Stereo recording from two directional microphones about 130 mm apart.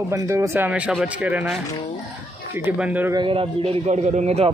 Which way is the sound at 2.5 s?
10° right (ahead or behind).